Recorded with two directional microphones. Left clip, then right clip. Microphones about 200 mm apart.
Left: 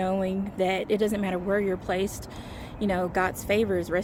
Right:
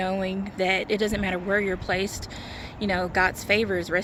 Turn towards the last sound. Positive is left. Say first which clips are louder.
# right 2 dB
turn(degrees=10)  # may be behind; listen again after turning